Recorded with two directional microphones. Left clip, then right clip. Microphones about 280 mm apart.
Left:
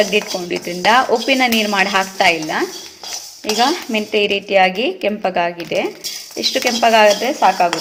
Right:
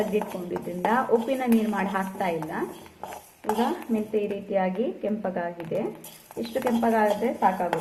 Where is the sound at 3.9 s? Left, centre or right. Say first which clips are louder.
Left 11 dB; left.